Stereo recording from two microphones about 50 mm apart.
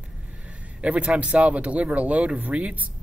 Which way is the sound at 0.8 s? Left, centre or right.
Right.